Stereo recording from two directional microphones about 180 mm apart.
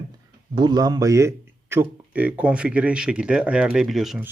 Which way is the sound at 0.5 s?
25° right (ahead or behind).